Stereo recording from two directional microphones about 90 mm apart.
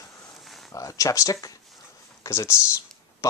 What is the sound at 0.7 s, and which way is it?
Speech, 40° left (ahead or behind).